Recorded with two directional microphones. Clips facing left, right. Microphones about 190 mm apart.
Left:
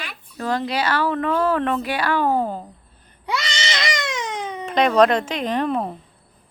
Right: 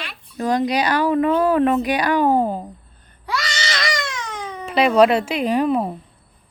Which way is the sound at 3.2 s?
20° left (ahead or behind).